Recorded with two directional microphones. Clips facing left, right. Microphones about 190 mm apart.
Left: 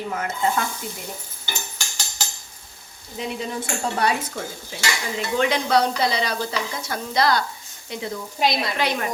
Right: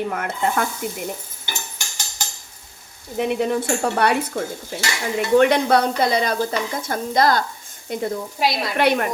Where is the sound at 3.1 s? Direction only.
60° right (ahead or behind).